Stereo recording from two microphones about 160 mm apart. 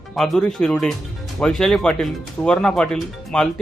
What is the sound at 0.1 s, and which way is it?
Speech, 5° left (ahead or behind).